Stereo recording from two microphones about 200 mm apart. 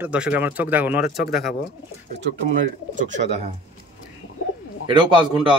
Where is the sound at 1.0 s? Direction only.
50° left (ahead or behind).